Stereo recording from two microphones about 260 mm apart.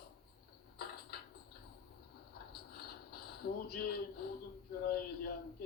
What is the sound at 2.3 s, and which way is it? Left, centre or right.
Mechanisms, left.